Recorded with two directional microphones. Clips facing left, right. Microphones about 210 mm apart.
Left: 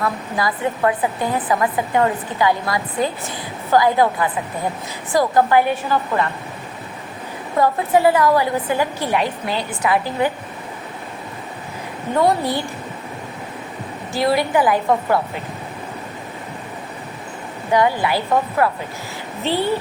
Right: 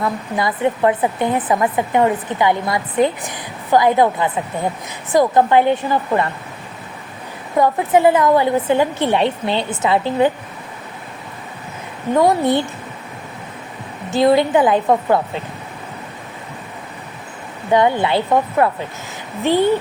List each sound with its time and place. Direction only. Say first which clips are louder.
0.0 s speech: right 2 dB; 20° right (ahead or behind)
7.6 s speech: right 2 dB; 20° right (ahead or behind)
12.1 s speech: right 3 dB; 20° right (ahead or behind)
14.1 s speech: right 5 dB; 20° right (ahead or behind)
17.7 s speech: right 2 dB; 20° right (ahead or behind)